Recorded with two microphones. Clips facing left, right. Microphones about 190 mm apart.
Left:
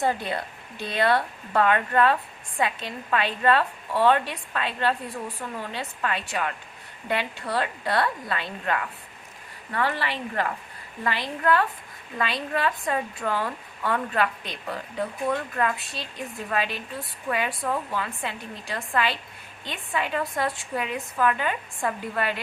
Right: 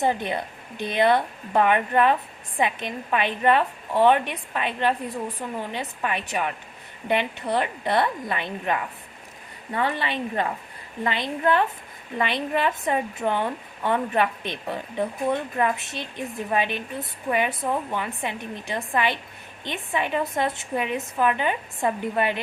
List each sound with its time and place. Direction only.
0.0 s a woman's voice: 20° right (ahead or behind)